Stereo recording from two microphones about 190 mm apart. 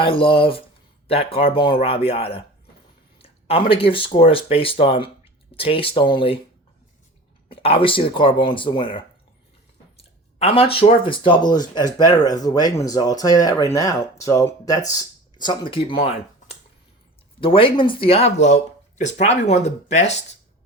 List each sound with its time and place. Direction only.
0.0 s speech: 30° left (ahead or behind)
3.2 s a sound: 30° left (ahead or behind)
3.7 s speech: 30° left (ahead or behind)
7.4 s speech: 30° left (ahead or behind)
10.0 s a sound: 30° left (ahead or behind)
11.0 s speech: 25° left (ahead or behind)